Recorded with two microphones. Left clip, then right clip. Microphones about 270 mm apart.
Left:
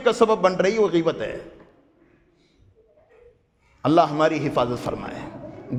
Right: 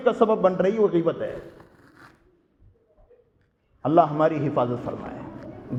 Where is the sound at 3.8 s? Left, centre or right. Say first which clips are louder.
Left 1 dB; left.